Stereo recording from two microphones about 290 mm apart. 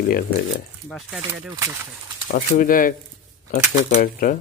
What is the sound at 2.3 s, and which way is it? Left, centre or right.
Speech, left.